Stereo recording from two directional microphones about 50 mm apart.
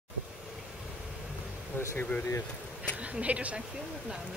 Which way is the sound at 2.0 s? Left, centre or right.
Left.